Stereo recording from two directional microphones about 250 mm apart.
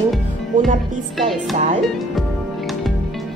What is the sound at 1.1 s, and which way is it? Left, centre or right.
Music, centre.